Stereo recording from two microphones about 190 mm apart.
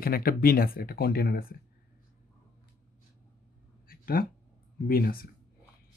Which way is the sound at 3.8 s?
50° left (ahead or behind).